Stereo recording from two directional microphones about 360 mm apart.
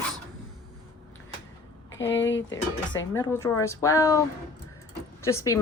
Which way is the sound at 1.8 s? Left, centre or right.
Left.